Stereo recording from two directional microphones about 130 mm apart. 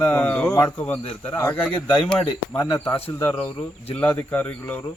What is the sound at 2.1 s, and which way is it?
Speech, 5° left (ahead or behind).